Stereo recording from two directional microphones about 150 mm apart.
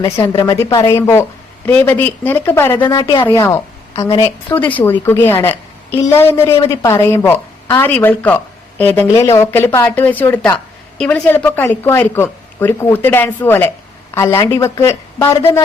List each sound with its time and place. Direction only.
0.2 s a woman's voice: 20° left (ahead or behind)